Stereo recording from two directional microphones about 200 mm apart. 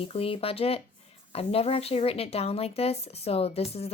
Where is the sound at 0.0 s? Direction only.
30° left (ahead or behind).